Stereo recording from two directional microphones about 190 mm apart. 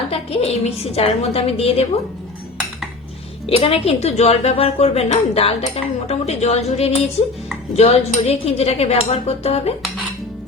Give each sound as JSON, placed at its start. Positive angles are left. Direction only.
{"t": 0.1, "sound": "speech", "side_deg": 30}
{"t": 3.4, "sound": "speech", "side_deg": 30}